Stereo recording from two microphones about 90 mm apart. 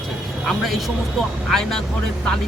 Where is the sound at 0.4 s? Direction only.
Centre (ahead or behind).